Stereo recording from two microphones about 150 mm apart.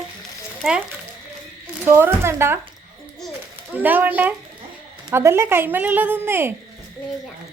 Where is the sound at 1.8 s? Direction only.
15° right (ahead or behind).